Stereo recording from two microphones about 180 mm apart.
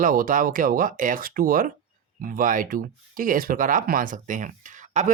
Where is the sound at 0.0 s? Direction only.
50° right (ahead or behind).